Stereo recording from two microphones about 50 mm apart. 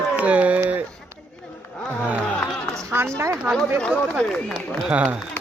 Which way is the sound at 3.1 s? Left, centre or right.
Right.